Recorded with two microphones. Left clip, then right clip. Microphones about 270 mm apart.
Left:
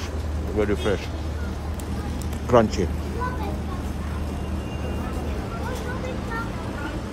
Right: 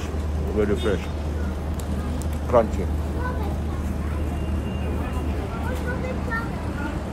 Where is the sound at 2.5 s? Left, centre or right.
Left.